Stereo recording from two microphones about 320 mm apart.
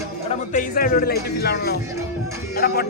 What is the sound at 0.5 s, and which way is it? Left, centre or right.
Speech, left.